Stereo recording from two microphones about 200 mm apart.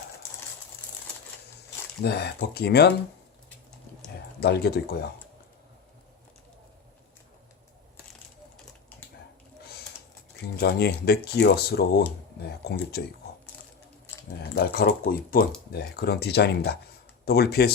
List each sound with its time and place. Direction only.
2.0 s speech: 55° left (ahead or behind)
4.4 s speech: 55° left (ahead or behind)
10.6 s speech: 55° left (ahead or behind)
14.5 s speech: 50° left (ahead or behind)